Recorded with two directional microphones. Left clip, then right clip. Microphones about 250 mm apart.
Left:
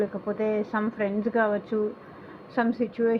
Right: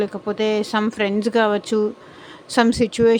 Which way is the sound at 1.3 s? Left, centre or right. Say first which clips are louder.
Right 6 dB; right.